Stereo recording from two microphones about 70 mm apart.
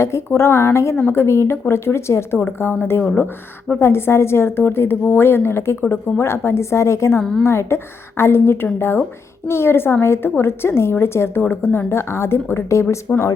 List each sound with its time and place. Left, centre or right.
0.3 s a woman's voice: left
7.2 s a woman's voice: centre
7.4 s a woman's voice: left
13.1 s speech: centre